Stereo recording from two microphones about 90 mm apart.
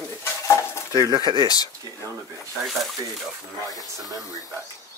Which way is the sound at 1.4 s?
45° left (ahead or behind).